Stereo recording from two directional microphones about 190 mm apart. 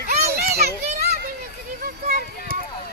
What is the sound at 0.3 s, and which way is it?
Children playing, 55° right (ahead or behind).